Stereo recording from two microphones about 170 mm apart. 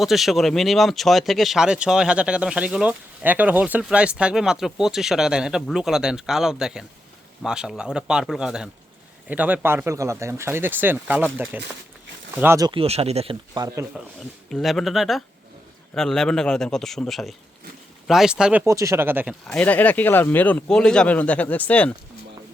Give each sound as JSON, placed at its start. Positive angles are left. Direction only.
{"t": 0.0, "sound": "speech", "side_deg": 0}
{"t": 12.7, "sound": "speech", "side_deg": -35}
{"t": 13.5, "sound": "speech", "side_deg": -25}
{"t": 14.5, "sound": "speech", "side_deg": 0}
{"t": 18.6, "sound": "speech", "side_deg": -15}
{"t": 19.3, "sound": "speech", "side_deg": 5}